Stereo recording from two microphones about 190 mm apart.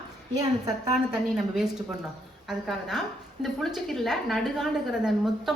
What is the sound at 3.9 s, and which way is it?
A woman's voice, centre (ahead or behind).